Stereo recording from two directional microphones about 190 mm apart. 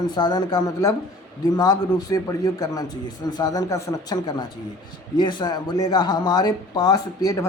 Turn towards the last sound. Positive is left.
turn(degrees=15)  # may be behind; listen again after turning